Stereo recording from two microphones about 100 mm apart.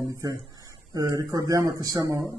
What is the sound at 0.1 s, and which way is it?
Speech, 35° right (ahead or behind).